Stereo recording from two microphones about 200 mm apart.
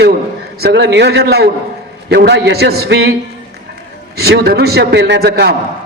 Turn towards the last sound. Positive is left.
turn(degrees=-50)  # may be behind; listen again after turning